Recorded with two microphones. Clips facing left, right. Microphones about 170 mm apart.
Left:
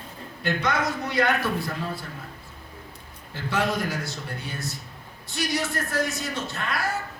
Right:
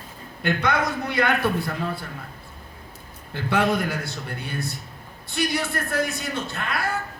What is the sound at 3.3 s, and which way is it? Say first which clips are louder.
A man's voice: right 4 dB; 60° right (ahead or behind).